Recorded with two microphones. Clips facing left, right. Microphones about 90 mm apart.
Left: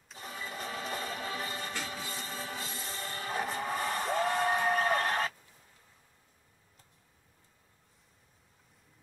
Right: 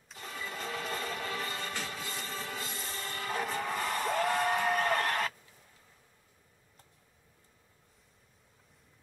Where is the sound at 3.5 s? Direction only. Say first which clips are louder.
Even; 25° left (ahead or behind).